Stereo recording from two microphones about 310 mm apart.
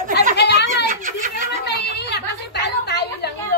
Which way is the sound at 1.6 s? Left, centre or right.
Left.